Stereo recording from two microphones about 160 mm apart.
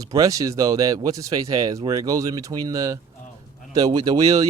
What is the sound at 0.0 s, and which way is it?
Speech, 20° right (ahead or behind).